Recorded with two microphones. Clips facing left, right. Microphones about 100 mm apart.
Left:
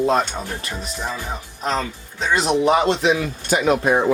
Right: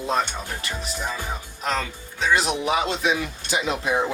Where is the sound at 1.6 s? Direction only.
35° left (ahead or behind).